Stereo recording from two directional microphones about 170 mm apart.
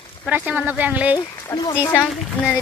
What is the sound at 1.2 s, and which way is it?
Speech, 25° left (ahead or behind).